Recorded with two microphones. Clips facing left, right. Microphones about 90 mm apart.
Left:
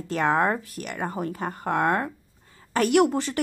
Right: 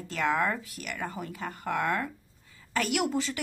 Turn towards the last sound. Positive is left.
turn(degrees=55)  # may be behind; listen again after turning